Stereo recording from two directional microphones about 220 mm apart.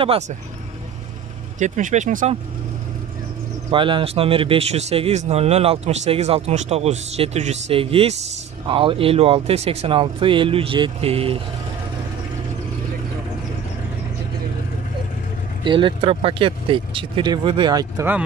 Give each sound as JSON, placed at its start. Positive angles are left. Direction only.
{"t": 0.0, "sound": "speech", "side_deg": -25}
{"t": 1.6, "sound": "speech", "side_deg": -35}
{"t": 3.7, "sound": "speech", "side_deg": -20}
{"t": 15.6, "sound": "speech", "side_deg": -20}